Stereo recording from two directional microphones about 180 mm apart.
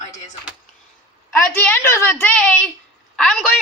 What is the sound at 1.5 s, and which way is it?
A woman's voice, 10° left (ahead or behind).